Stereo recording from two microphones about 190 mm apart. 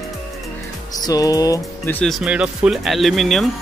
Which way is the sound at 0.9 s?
20° left (ahead or behind).